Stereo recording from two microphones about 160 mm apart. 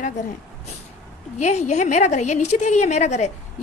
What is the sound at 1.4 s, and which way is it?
A woman's voice, 45° left (ahead or behind).